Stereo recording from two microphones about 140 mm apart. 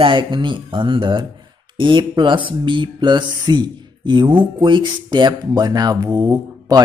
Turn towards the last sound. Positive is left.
turn(degrees=-25)  # may be behind; listen again after turning